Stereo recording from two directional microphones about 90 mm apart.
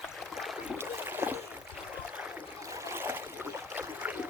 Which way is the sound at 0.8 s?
25° right (ahead or behind).